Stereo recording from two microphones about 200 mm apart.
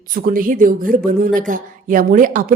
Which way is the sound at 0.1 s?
45° right (ahead or behind).